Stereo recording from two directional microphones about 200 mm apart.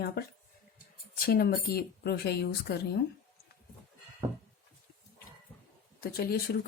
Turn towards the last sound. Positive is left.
turn(degrees=50)  # may be behind; listen again after turning